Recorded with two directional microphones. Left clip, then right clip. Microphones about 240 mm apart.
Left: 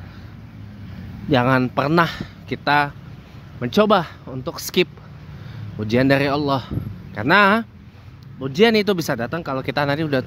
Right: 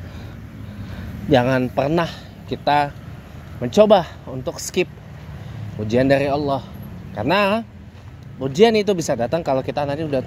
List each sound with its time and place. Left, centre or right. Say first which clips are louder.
1.3 s a man's voice: right 1 dB; centre
8.4 s a man's voice: right 1 dB; centre
9.3 s speech: right 6 dB; centre
9.7 s speech: left 2 dB; left